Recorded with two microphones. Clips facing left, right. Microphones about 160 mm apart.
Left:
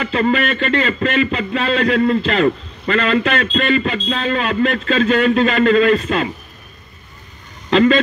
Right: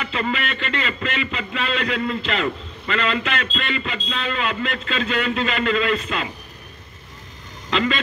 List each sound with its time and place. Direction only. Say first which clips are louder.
0.1 s a man's voice: left 9 dB; 50° left (ahead or behind)
7.7 s speech: left 10 dB; 45° left (ahead or behind)